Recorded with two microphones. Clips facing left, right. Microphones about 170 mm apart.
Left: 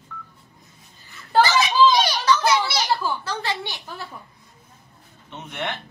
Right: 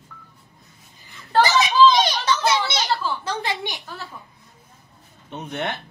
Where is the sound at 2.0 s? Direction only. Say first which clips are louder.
Left 1 dB; 25° right (ahead or behind).